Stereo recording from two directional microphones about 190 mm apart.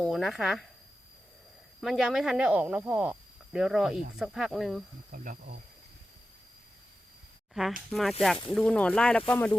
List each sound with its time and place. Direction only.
0.0 s speech: centre (ahead or behind)
1.8 s speech: centre (ahead or behind)
5.1 s speech: 45° right (ahead or behind)
7.9 s speech: centre (ahead or behind)